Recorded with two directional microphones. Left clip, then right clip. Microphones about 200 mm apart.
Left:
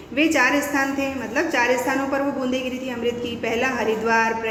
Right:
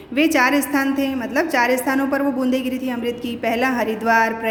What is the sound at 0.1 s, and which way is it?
A man's voice, 55° right (ahead or behind).